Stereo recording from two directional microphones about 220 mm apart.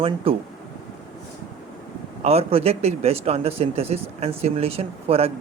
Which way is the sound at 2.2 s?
25° right (ahead or behind).